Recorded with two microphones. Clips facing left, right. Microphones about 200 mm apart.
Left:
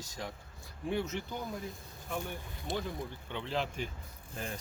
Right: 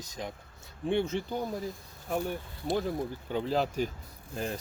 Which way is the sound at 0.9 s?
30° right (ahead or behind).